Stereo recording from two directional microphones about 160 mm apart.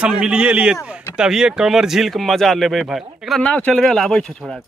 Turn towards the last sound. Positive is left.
turn(degrees=0)  # may be behind; listen again after turning